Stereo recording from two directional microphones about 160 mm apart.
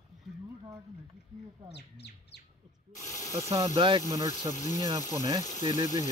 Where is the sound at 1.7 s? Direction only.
90° left.